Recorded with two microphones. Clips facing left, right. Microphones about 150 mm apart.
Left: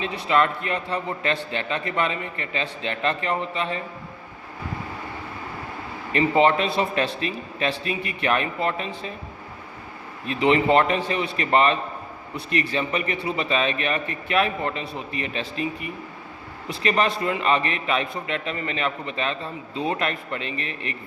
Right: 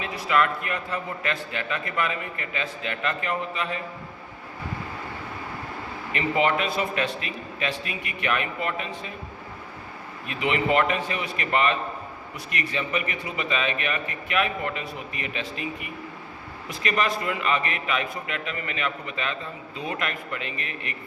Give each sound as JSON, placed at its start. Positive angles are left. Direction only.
{"t": 0.0, "sound": "a man's voice", "side_deg": 30}
{"t": 6.1, "sound": "a man's voice", "side_deg": 30}
{"t": 10.2, "sound": "a man's voice", "side_deg": 35}